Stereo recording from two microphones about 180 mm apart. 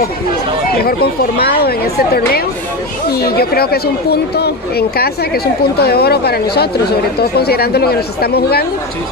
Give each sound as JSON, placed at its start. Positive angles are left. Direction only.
{"t": 0.8, "sound": "speech", "side_deg": 60}